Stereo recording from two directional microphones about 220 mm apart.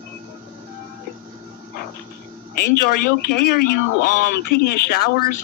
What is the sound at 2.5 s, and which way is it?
Speech, 45° left (ahead or behind).